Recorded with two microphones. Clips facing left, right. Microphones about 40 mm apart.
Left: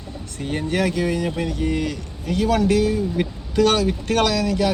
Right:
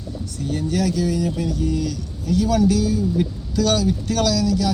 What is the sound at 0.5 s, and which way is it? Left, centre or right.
Speech, left.